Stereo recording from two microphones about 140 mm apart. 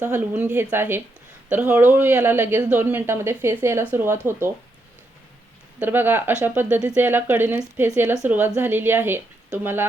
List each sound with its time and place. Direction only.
0.0 s speech: 15° right (ahead or behind)
5.8 s speech: 15° right (ahead or behind)